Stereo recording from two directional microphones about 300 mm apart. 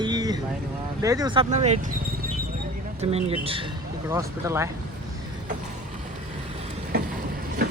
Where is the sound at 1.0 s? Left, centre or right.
Centre.